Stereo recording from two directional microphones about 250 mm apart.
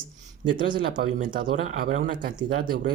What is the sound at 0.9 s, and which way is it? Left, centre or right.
Speech, right.